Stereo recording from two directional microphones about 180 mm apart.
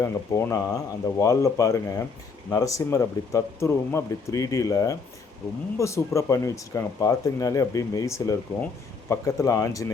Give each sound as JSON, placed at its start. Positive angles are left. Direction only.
{"t": 0.0, "sound": "speech", "side_deg": 15}